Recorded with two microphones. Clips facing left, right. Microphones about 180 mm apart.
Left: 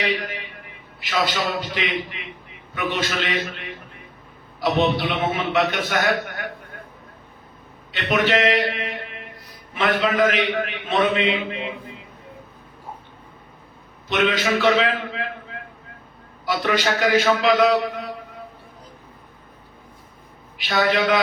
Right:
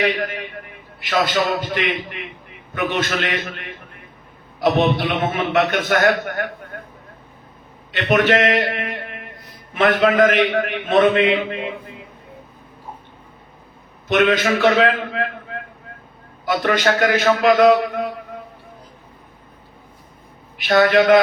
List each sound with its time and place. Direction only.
0.0 s a man's voice: 50° right (ahead or behind)
4.6 s a man's voice: 50° right (ahead or behind)
7.9 s a man's voice: 55° right (ahead or behind)
14.1 s a man's voice: 50° right (ahead or behind)
16.5 s a man's voice: 55° right (ahead or behind)
20.7 s a man's voice: 50° right (ahead or behind)